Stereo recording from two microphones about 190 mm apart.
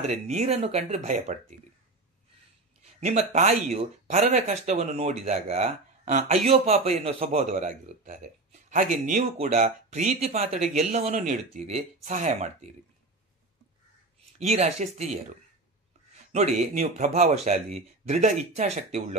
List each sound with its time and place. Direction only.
0.0 s speech: 35° right (ahead or behind)
3.1 s speech: 40° right (ahead or behind)
14.4 s speech: 35° right (ahead or behind)
16.3 s a man's voice: 35° right (ahead or behind)